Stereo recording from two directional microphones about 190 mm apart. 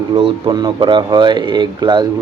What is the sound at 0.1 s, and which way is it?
Speech, 30° right (ahead or behind).